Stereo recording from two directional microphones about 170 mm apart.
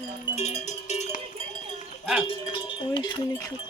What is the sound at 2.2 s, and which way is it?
Cowbell, 30° left (ahead or behind).